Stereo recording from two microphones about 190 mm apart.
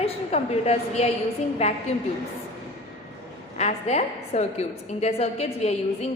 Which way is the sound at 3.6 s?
35° left (ahead or behind).